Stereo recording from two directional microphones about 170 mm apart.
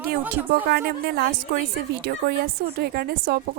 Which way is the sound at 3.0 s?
60° right (ahead or behind).